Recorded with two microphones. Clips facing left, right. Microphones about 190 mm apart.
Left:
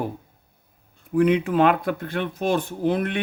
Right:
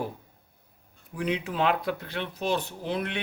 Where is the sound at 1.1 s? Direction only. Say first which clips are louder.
Left 10 dB; 55° left (ahead or behind).